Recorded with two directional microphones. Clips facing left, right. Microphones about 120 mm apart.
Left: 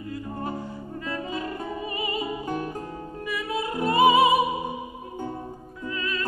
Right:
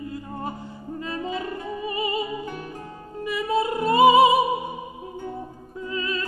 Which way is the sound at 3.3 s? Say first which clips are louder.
Right 6 dB; 25° right (ahead or behind).